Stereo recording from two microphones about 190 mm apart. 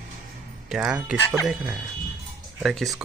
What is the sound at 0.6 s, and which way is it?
Speech, 5° right (ahead or behind).